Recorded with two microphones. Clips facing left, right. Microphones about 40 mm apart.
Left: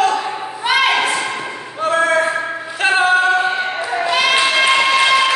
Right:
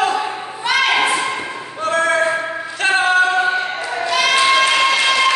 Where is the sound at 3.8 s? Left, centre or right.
Centre.